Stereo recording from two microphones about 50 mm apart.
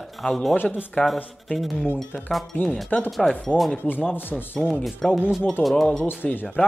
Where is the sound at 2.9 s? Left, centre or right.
Left.